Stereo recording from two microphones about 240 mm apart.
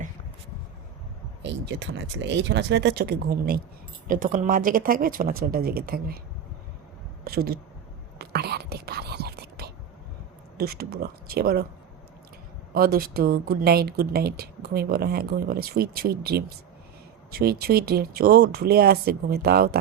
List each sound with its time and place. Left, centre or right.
1.4 s speech: right
7.3 s speech: right
8.2 s whispering: right
10.6 s speech: right
12.7 s speech: right